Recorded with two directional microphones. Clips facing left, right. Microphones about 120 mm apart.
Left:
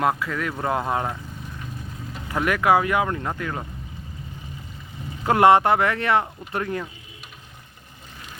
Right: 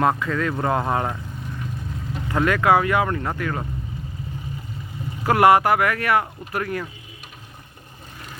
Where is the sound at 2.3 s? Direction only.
15° left (ahead or behind).